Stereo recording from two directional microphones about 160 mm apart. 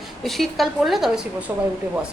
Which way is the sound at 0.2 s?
Centre (ahead or behind).